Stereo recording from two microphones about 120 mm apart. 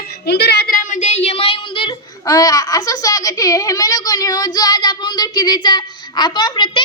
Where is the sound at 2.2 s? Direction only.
30° left (ahead or behind).